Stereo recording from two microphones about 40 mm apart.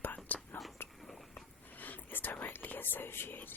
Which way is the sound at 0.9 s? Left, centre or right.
Centre.